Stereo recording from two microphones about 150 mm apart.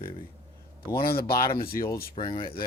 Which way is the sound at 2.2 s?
35° left (ahead or behind).